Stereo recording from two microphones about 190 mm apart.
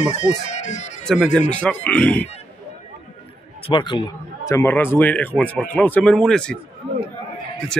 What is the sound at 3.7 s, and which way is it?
A man's voice, 25° left (ahead or behind).